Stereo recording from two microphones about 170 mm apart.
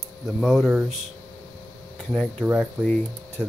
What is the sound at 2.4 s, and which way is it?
Speech, 5° right (ahead or behind).